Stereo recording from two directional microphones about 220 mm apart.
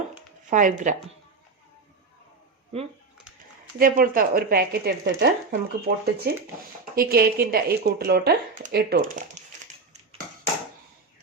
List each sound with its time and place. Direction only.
0.5 s speech: 35° right (ahead or behind)
3.8 s speech: 40° right (ahead or behind)